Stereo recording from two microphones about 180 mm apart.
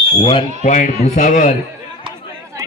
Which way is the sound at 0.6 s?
45° left (ahead or behind).